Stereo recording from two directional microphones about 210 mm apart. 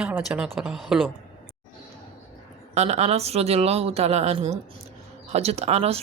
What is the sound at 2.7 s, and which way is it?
Speech, 30° right (ahead or behind).